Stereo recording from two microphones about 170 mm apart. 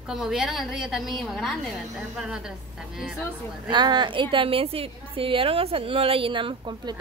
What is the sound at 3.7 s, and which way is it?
A woman's voice, 25° right (ahead or behind).